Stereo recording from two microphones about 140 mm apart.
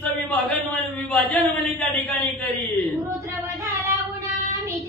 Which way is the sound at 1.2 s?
10° left (ahead or behind).